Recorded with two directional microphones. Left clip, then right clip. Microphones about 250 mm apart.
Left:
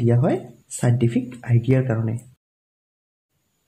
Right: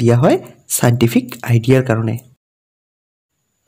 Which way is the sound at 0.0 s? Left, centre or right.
Right.